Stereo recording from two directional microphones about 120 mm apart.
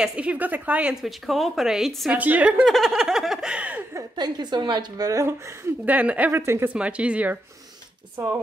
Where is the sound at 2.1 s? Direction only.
15° right (ahead or behind).